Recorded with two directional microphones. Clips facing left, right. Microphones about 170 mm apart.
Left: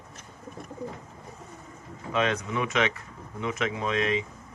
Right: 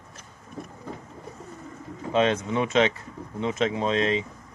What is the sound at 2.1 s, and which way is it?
A man's voice, 30° right (ahead or behind).